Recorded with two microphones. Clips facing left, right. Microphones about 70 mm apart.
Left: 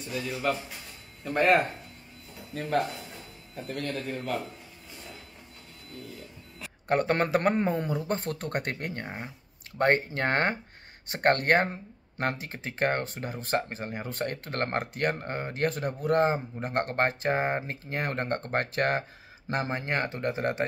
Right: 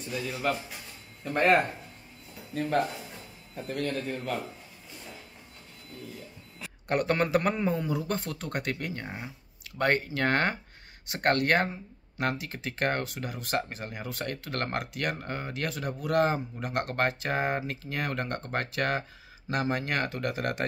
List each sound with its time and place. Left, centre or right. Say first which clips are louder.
0.1 s a man's voice: left 1 dB; centre
6.9 s speech: left 1 dB; left